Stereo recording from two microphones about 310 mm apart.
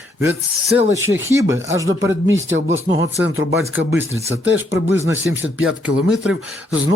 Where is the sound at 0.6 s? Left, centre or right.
Centre.